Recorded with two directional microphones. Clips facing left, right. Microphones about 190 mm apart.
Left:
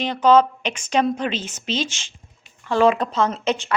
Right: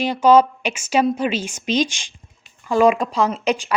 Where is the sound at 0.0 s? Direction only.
10° right (ahead or behind).